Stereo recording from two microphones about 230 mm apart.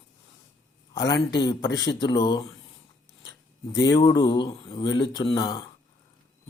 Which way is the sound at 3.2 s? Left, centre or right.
Left.